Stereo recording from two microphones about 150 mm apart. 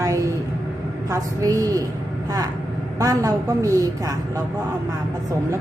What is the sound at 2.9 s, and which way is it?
A woman's voice, 25° right (ahead or behind).